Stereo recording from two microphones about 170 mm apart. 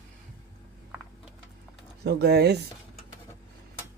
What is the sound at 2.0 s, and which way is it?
Speech, 75° right (ahead or behind).